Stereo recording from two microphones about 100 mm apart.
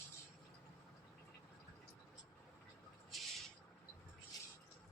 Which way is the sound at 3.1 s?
Centre (ahead or behind).